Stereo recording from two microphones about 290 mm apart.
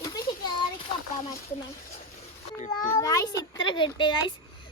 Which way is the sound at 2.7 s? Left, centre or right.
Centre.